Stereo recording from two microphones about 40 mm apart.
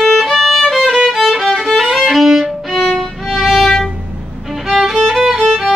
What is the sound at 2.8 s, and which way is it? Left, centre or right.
Music, centre.